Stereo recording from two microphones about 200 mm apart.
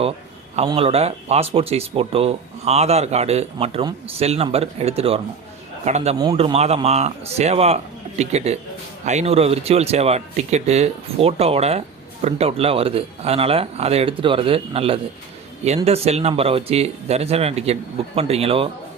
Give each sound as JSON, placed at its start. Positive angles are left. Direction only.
{"t": 0.5, "sound": "speech", "side_deg": -30}